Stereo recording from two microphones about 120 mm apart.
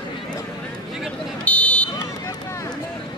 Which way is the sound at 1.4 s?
10° left (ahead or behind).